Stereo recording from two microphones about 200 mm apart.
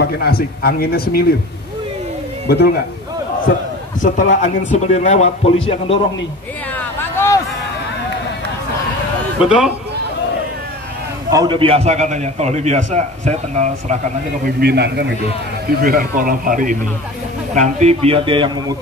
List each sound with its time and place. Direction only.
0.0 s speech: 50° left (ahead or behind)
2.4 s a man's voice: 55° left (ahead or behind)
4.0 s a man's voice: 40° left (ahead or behind)
6.8 s a sound: 10° left (ahead or behind)
9.4 s a man's voice: 5° right (ahead or behind)
11.2 s a man's voice: 20° right (ahead or behind)
14.6 s a man's voice: 55° right (ahead or behind); by 18.8 s 25° right (ahead or behind)